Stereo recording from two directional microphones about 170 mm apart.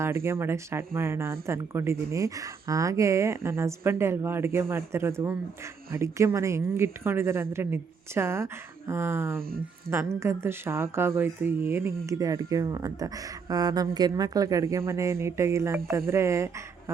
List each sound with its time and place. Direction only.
0.0 s speech: 15° right (ahead or behind)